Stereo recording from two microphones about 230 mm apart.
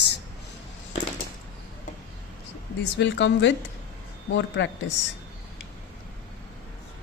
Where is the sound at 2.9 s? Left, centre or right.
Left.